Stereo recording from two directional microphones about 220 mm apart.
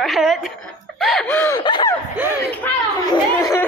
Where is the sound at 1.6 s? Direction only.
20° left (ahead or behind).